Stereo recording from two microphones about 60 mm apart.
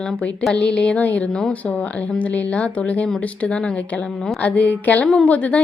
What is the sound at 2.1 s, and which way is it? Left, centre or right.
Speech, left.